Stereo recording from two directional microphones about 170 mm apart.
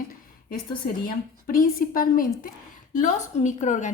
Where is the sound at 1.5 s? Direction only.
55° left (ahead or behind).